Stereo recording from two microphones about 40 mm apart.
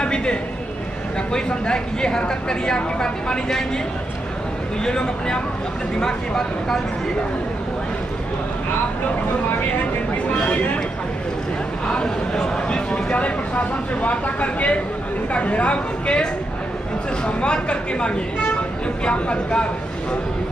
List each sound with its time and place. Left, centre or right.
0.0 s a man's voice: left
4.8 s a woman's voice: left
10.3 s a woman's voice: left
12.6 s a woman's voice: left
17.4 s a woman's voice: left